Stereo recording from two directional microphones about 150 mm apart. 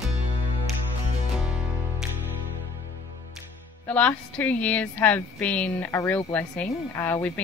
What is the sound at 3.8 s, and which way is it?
Speech, 10° left (ahead or behind).